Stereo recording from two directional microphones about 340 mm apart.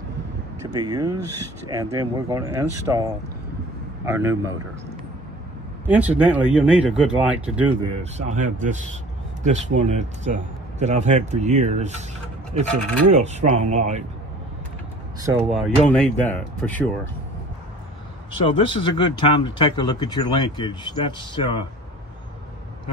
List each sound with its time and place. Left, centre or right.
0.7 s speech: centre
5.9 s speech: centre
8.0 s a man's voice: right
12.6 s speech: centre
13.2 s a man's voice: centre
15.1 s speech: centre
15.9 s speech: centre
18.4 s speech: centre